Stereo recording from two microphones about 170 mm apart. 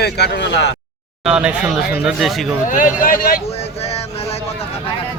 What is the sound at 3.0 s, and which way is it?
Speech, 55° left (ahead or behind).